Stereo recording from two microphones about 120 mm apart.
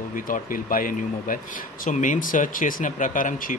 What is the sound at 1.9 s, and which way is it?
Speech, 90° left.